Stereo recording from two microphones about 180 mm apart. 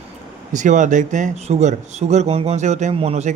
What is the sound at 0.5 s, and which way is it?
Speech, 45° right (ahead or behind).